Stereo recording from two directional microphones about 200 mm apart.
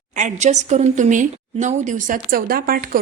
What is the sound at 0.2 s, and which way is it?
Speech, 35° right (ahead or behind).